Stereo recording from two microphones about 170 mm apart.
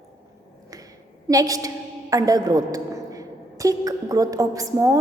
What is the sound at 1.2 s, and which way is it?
A woman's voice, 20° right (ahead or behind).